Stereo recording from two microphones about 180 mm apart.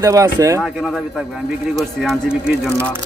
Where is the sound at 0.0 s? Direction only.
20° right (ahead or behind).